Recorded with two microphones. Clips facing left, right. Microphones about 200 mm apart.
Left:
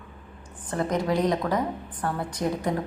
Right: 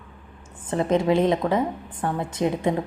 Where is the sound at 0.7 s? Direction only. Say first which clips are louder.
Right 5 dB; 25° right (ahead or behind).